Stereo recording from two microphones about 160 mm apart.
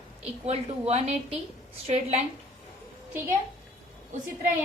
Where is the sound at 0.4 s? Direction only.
40° right (ahead or behind).